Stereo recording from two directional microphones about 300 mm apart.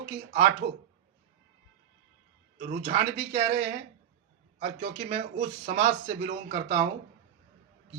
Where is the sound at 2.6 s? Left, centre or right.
Right.